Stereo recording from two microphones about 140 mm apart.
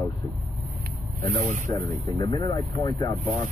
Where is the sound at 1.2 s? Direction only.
60° right (ahead or behind).